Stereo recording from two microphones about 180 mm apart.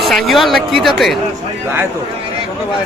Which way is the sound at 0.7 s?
Centre (ahead or behind).